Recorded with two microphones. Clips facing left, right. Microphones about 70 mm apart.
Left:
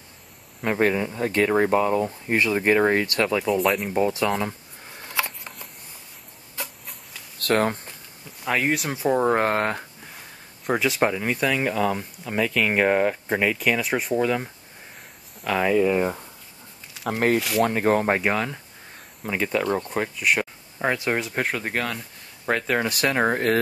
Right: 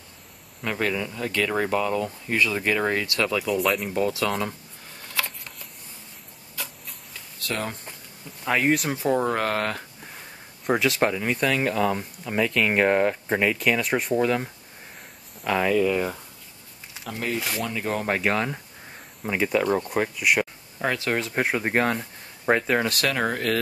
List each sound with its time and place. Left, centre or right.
0.6 s speech: left
5.0 s a sound: centre
7.3 s speech: left
8.5 s speech: centre
9.3 s speech: left
10.7 s speech: centre
15.7 s speech: centre
17.0 s speech: left
18.2 s speech: centre
20.8 s speech: centre
21.4 s speech: centre
21.6 s speech: right
22.6 s speech: centre
23.0 s speech: left